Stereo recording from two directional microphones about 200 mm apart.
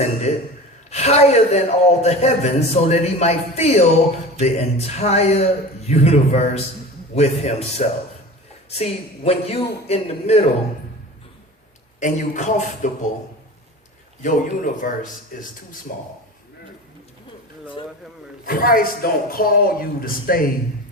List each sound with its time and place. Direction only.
0.0 s a man's voice: 35° left (ahead or behind)
11.9 s a man's voice: 35° left (ahead or behind)
14.2 s a man's voice: 40° left (ahead or behind)
18.4 s a woman's voice: 45° left (ahead or behind)